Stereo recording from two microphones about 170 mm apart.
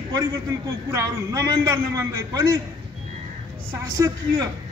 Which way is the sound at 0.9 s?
20° right (ahead or behind).